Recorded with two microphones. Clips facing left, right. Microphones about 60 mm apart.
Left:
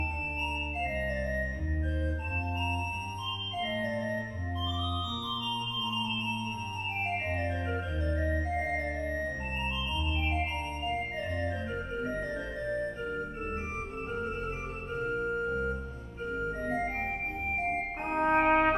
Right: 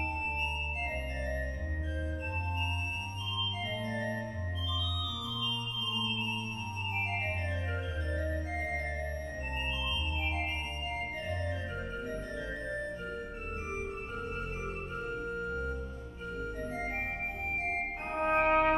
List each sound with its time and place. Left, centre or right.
3.6 s organ: left
8.2 s music: left
15.0 s organ: left
18.0 s brass instrument: left
18.3 s brass instrument: left